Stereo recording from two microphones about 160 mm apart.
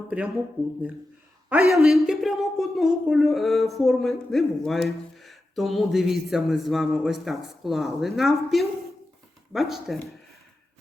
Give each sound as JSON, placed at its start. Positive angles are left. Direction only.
{"t": 1.5, "sound": "speech", "side_deg": -5}